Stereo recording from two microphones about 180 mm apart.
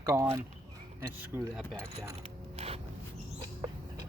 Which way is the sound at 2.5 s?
35° right (ahead or behind).